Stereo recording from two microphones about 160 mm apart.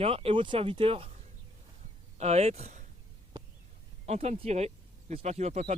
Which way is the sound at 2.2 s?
45° right (ahead or behind).